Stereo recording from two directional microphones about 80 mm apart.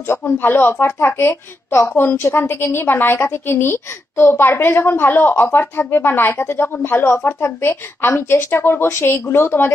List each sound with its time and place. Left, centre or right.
0.1 s a woman's voice: left